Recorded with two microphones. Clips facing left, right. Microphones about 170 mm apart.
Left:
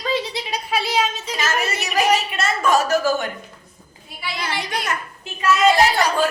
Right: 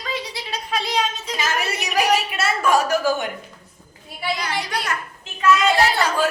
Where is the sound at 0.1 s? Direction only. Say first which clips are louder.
Left 5 dB; 25° left (ahead or behind).